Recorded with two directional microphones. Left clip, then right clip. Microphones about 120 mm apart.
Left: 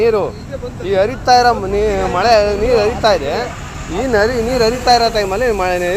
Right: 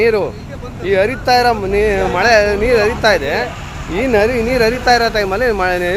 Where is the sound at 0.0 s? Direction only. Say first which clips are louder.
Even; 20° right (ahead or behind).